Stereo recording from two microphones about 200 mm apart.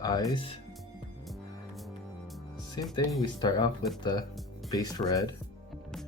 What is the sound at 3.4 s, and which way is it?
Speech, 20° left (ahead or behind).